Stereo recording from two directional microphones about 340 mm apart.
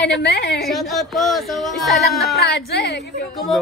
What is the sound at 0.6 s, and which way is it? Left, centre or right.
A woman's voice, centre.